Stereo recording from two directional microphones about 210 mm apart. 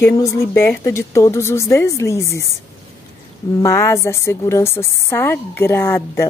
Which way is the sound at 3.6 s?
15° left (ahead or behind).